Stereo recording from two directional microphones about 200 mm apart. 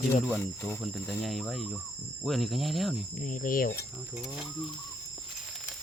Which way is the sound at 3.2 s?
40° left (ahead or behind).